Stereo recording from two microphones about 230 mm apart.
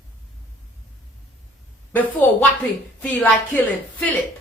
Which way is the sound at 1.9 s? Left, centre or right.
Centre.